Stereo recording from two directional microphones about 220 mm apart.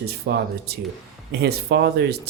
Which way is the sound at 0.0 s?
45° right (ahead or behind).